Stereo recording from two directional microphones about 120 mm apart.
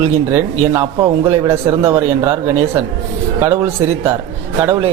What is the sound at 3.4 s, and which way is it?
Speech, 20° right (ahead or behind).